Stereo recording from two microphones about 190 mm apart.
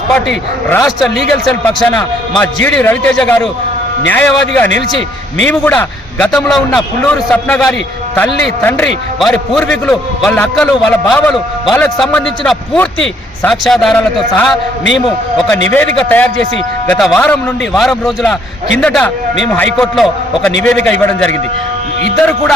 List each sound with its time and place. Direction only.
0.7 s a man's voice: 15° left (ahead or behind)
0.9 s a man's voice: centre (ahead or behind)
15.7 s a man's voice: 10° left (ahead or behind)